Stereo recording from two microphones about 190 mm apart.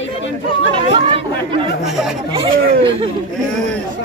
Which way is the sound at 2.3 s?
30° right (ahead or behind).